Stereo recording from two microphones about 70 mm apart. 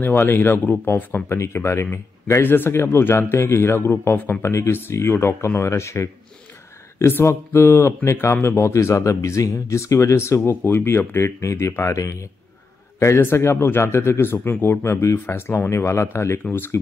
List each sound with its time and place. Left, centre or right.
0.0 s speech: left
2.4 s speech: left